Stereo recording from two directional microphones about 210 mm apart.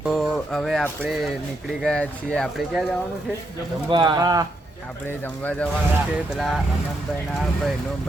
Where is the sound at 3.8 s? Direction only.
20° right (ahead or behind).